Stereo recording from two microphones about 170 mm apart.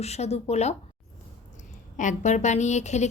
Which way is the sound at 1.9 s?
45° left (ahead or behind).